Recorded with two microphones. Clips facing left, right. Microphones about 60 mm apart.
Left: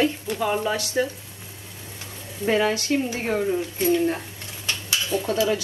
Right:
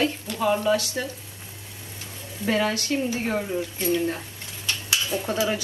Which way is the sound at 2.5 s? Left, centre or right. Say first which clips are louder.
Left 3 dB; left.